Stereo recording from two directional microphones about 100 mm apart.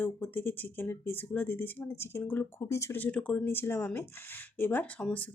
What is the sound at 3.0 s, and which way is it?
Speech, 15° left (ahead or behind).